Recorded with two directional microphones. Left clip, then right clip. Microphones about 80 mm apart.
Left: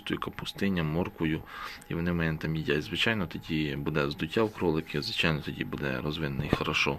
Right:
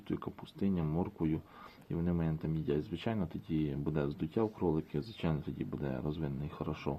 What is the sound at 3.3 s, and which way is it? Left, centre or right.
Speech, right.